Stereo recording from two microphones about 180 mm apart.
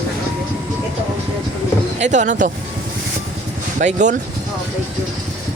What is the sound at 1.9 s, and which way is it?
Speech, 40° right (ahead or behind).